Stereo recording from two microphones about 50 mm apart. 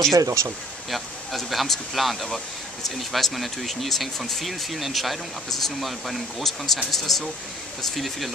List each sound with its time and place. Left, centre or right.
0.1 s speech: right
0.8 s speech: centre